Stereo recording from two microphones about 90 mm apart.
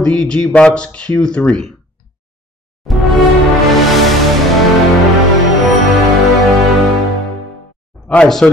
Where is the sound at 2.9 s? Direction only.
Centre (ahead or behind).